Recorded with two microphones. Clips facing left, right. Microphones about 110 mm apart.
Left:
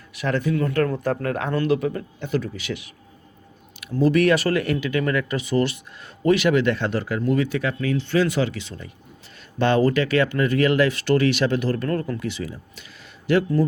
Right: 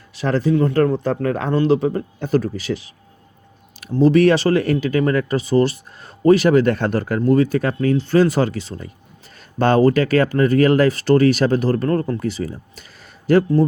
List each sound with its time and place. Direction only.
0.1 s speech: 30° right (ahead or behind)